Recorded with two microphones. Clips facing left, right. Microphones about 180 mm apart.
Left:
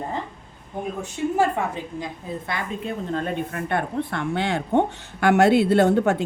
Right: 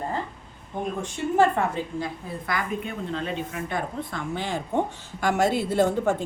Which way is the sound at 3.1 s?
50° left (ahead or behind).